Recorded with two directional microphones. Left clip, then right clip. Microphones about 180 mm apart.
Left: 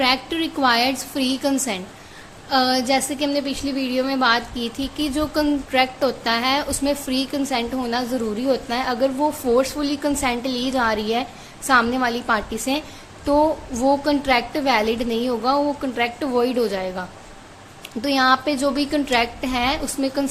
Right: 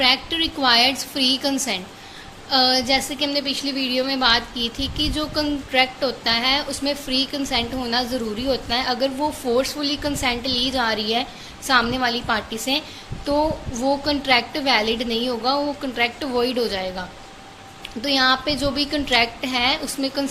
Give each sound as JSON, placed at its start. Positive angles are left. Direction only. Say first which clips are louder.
{"t": 0.0, "sound": "a woman's voice", "louder": "right 1 dB", "side_deg": 25}